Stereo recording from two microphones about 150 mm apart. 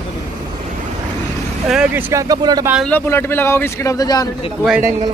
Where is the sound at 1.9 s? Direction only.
20° right (ahead or behind).